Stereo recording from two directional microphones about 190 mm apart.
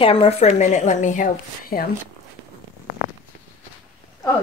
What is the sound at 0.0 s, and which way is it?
Speech, 30° left (ahead or behind).